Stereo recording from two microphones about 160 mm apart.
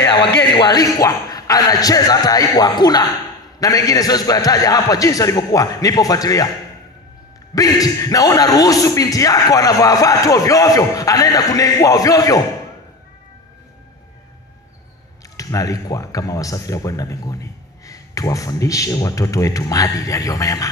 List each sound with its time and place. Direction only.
0.0 s a sound: 30° left (ahead or behind)
0.4 s a man's voice: 25° left (ahead or behind)
7.5 s a man's voice: 20° left (ahead or behind)
15.3 s a man's voice: 20° left (ahead or behind)